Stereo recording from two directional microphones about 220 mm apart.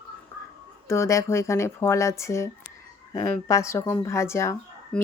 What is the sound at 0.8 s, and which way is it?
Speech, 10° left (ahead or behind).